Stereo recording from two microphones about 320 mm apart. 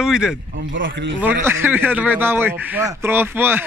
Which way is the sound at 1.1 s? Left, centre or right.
Centre.